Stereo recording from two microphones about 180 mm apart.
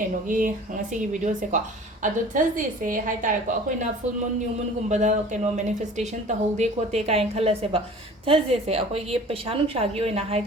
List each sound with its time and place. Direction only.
0.0 s a woman's voice: 50° right (ahead or behind)
2.3 s a woman's voice: 50° right (ahead or behind)
4.9 s a woman's voice: 40° right (ahead or behind)